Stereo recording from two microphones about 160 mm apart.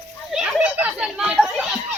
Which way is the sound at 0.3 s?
5° right (ahead or behind).